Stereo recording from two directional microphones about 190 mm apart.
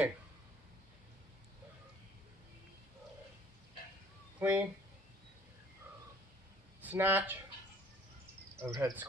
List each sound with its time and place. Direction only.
4.4 s speech: 10° right (ahead or behind)
6.8 s speech: 10° right (ahead or behind)
8.6 s cricket: 20° right (ahead or behind)